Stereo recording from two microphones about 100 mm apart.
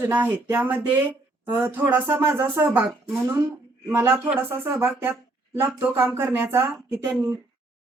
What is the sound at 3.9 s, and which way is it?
Speech, 20° right (ahead or behind).